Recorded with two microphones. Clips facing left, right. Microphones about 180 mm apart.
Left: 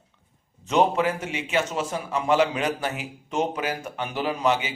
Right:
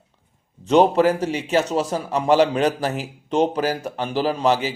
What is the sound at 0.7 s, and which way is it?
A man's voice, 35° right (ahead or behind).